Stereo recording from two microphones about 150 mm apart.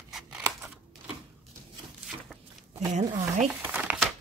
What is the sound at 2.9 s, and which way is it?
Speech, 50° right (ahead or behind).